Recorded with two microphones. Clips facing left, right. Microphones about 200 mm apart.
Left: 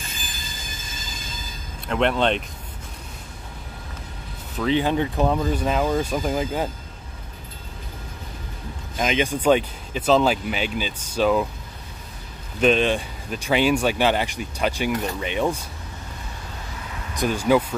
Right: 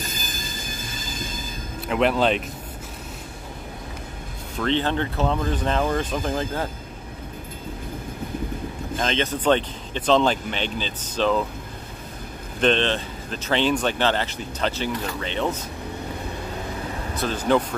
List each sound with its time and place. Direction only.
0.0 s train wheels squealing: 40° right (ahead or behind)
1.9 s speech: 5° right (ahead or behind)
4.6 s speech: 10° left (ahead or behind)
8.9 s speech: 10° left (ahead or behind)
12.5 s speech: 10° left (ahead or behind)
17.1 s speech: 15° left (ahead or behind)